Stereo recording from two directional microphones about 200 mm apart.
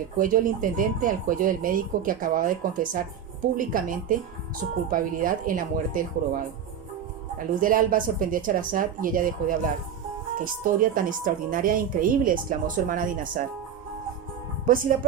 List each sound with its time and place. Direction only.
0.2 s a woman's voice: 40° right (ahead or behind)
14.7 s a woman's voice: 45° right (ahead or behind)